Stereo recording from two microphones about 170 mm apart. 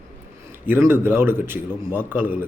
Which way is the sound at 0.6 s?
10° right (ahead or behind).